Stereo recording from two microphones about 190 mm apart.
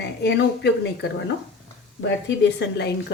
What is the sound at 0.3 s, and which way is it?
A woman's voice, 60° left (ahead or behind).